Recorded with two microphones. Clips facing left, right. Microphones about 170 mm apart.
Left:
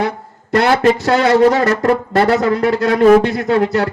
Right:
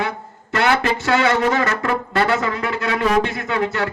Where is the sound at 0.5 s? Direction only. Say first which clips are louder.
Left 6 dB; 35° left (ahead or behind).